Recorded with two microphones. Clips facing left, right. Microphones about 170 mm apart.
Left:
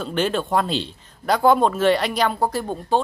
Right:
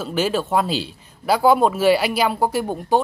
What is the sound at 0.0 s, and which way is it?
Speech, 5° right (ahead or behind).